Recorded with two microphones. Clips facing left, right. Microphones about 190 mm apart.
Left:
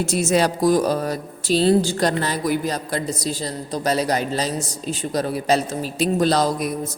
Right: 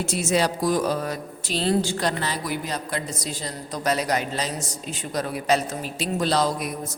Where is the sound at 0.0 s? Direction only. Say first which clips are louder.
Left 4 dB; 40° left (ahead or behind).